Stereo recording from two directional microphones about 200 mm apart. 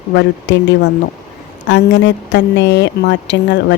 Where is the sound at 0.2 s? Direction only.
60° left (ahead or behind).